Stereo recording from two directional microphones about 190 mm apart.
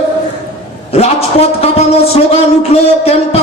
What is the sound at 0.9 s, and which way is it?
A man's voice, 30° left (ahead or behind).